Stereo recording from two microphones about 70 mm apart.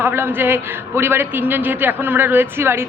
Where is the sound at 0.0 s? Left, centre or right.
Right.